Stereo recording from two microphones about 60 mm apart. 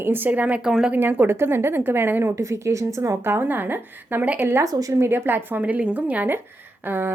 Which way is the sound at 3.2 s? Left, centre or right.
Right.